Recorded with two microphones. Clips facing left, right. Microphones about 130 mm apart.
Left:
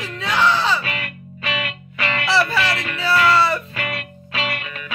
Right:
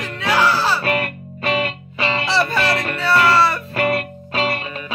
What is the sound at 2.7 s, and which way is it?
Music, 45° right (ahead or behind).